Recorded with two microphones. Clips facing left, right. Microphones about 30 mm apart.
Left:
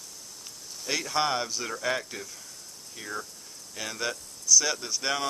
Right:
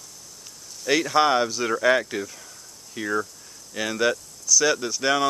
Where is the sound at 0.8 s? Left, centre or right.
Right.